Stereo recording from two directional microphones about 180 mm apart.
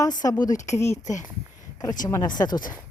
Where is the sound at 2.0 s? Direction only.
20° left (ahead or behind).